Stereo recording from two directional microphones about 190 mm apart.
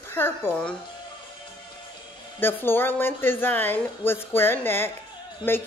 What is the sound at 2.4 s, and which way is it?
A woman's voice, 10° left (ahead or behind).